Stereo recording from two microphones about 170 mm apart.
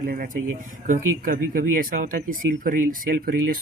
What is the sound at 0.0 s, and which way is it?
Speech, 50° right (ahead or behind).